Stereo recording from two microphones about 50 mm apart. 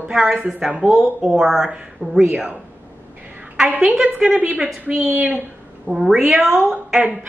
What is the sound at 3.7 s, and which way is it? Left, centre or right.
A woman's voice, right.